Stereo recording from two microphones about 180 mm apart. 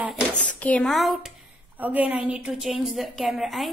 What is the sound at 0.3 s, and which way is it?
A woman's voice, 5° left (ahead or behind).